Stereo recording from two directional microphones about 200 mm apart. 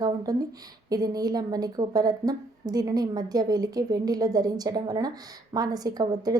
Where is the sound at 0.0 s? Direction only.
20° right (ahead or behind).